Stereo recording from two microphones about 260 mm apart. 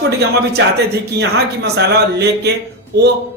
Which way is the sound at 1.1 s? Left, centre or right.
Right.